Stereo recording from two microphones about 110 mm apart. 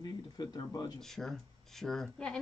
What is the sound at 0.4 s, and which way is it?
Speech, 35° left (ahead or behind).